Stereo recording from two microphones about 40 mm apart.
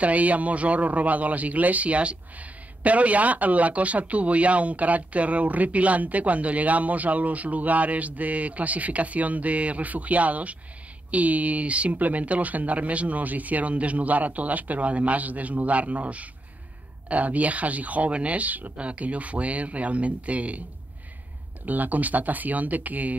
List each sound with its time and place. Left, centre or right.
0.0 s speech: right
21.6 s speech: right